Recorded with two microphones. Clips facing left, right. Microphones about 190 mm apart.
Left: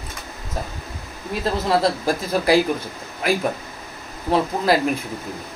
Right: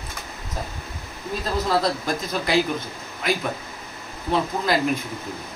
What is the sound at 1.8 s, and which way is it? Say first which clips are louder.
Speech: left 4 dB; 30° left (ahead or behind).